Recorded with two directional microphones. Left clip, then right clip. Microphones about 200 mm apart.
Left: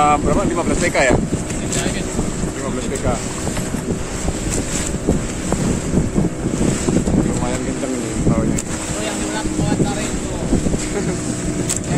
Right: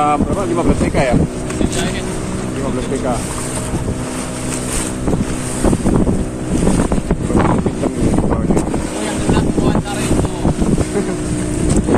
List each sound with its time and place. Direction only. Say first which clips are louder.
0.0 s speech: even; 15° left (ahead or behind)